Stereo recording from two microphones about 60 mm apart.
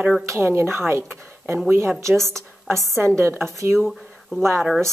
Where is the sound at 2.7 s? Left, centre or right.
Right.